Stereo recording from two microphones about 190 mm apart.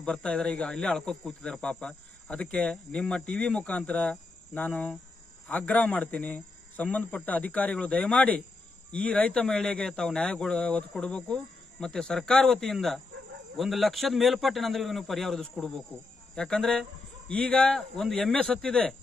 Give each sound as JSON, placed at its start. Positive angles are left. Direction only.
{"t": 0.0, "sound": "speech", "side_deg": 5}